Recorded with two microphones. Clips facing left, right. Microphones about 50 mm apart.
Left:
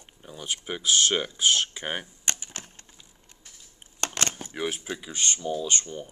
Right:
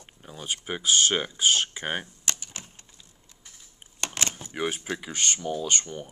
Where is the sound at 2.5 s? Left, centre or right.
Left.